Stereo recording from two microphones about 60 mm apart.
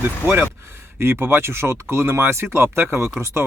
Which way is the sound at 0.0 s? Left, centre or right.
Right.